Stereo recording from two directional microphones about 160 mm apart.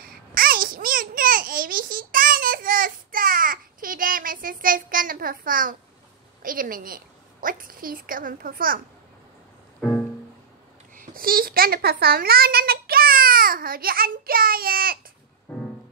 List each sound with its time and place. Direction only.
0.0 s babbling: 65° right (ahead or behind)
6.4 s a woman's voice: 60° right (ahead or behind)
9.8 s music: 5° left (ahead or behind)
11.0 s a child's voice: 65° right (ahead or behind)
15.5 s music: 10° left (ahead or behind)